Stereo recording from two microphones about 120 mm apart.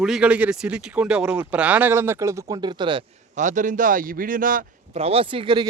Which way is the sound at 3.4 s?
90° right.